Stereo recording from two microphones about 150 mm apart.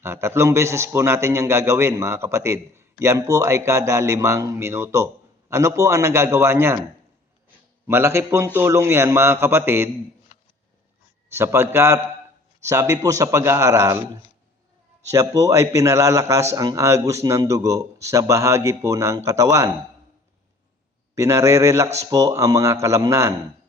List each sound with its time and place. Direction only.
0.0 s a man's voice: 20° right (ahead or behind)
7.9 s a man's voice: 15° right (ahead or behind)
11.3 s a man's voice: 15° right (ahead or behind)
21.2 s a man's voice: 20° right (ahead or behind)